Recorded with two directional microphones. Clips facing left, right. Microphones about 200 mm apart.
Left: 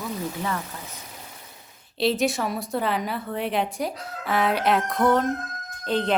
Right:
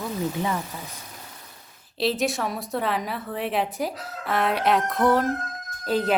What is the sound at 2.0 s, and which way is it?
A woman's voice, centre (ahead or behind).